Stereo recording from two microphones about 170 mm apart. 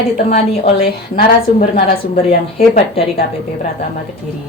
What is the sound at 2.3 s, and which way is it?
Speech, 40° left (ahead or behind).